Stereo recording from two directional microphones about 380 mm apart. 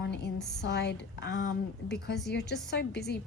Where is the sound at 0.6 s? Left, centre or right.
Left.